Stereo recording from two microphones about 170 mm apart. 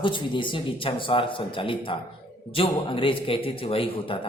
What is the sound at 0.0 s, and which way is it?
Speech, 30° left (ahead or behind).